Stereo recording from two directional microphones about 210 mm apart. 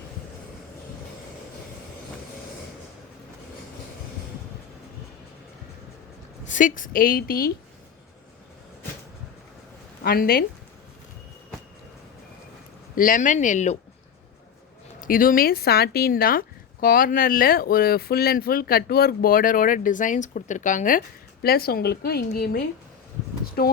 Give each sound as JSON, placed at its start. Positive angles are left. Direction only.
{"t": 6.5, "sound": "speech", "side_deg": 40}
{"t": 10.0, "sound": "speech", "side_deg": 45}
{"t": 13.0, "sound": "speech", "side_deg": 40}
{"t": 15.0, "sound": "speech", "side_deg": 40}
{"t": 23.6, "sound": "speech", "side_deg": 45}